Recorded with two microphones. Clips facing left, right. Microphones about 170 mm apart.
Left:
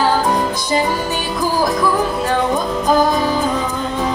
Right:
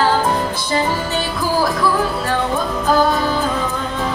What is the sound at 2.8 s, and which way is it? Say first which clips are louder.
Music: left 1 dB; 15° left (ahead or behind).